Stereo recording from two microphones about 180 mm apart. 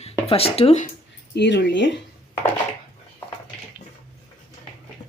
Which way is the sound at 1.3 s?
70° left (ahead or behind).